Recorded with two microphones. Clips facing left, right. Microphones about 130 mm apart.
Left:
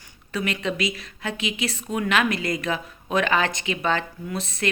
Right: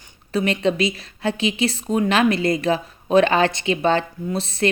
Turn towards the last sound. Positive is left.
turn(degrees=-30)  # may be behind; listen again after turning